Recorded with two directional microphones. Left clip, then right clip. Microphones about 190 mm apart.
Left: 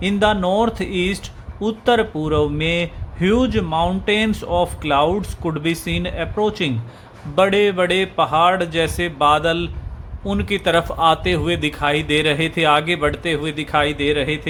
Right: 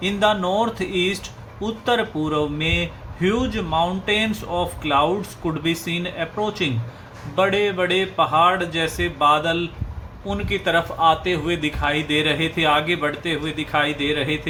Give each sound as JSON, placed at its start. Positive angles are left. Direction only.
{"t": 0.0, "sound": "speech", "side_deg": 45}